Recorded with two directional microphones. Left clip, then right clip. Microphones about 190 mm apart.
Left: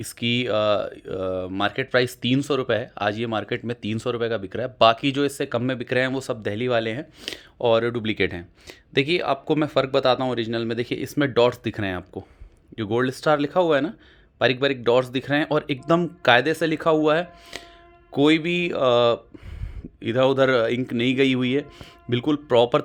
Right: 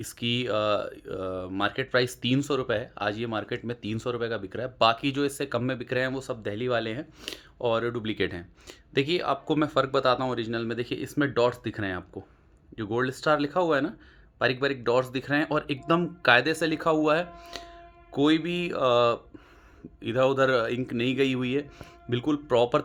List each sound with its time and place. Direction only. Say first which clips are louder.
0.0 s speech: left 5 dB; 25° left (ahead or behind)